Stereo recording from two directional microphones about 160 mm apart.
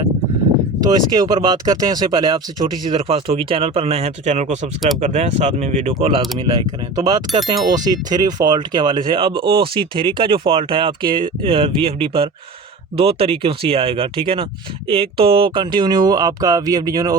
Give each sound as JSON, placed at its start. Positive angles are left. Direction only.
{"t": 0.8, "sound": "speech", "side_deg": -25}
{"t": 6.0, "sound": "speech", "side_deg": -35}